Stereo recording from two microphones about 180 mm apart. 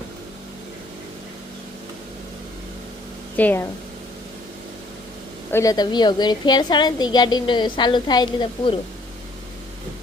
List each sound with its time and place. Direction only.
3.3 s speech: 10° left (ahead or behind)
5.5 s a woman's voice: 15° left (ahead or behind)